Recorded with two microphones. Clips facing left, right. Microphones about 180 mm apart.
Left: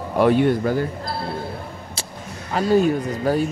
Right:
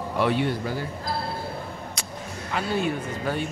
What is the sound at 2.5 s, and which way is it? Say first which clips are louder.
Speech: left 9 dB; 40° left (ahead or behind).